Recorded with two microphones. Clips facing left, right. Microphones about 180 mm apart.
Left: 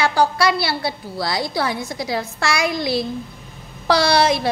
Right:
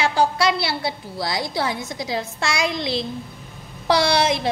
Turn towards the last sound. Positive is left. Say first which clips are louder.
# left 2 dB
turn(degrees=-20)  # may be behind; listen again after turning